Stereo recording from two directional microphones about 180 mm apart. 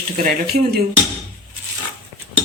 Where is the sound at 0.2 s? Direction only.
60° right (ahead or behind).